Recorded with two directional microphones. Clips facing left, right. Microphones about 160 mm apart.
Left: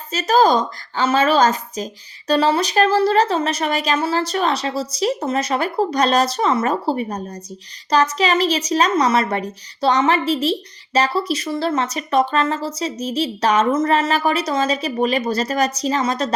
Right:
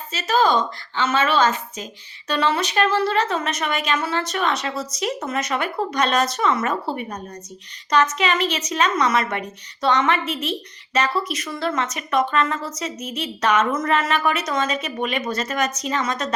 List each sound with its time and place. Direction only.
0.1 s a woman's voice: 40° left (ahead or behind)